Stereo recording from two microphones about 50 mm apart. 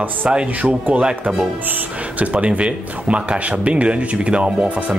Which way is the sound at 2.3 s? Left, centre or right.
Right.